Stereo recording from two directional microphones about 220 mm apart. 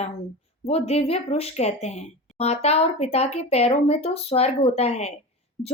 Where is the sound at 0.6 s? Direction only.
25° left (ahead or behind).